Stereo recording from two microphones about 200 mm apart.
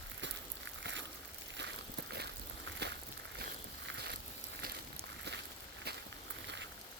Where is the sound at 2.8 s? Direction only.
60° right (ahead or behind).